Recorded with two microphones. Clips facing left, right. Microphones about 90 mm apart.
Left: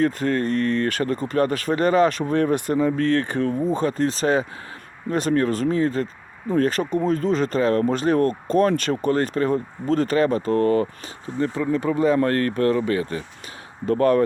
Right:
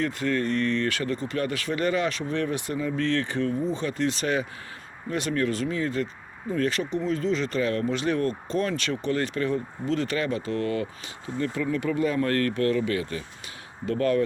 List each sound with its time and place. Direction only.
0.0 s speech: 40° left (ahead or behind)